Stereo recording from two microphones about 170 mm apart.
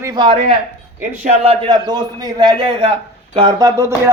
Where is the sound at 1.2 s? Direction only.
35° right (ahead or behind).